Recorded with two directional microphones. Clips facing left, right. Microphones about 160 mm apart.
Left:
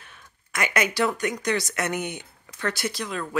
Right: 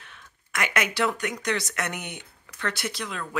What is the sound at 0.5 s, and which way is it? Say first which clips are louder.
Speech: left 2 dB; centre (ahead or behind).